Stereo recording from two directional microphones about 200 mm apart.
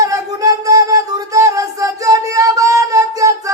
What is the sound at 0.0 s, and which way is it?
Music, 15° right (ahead or behind).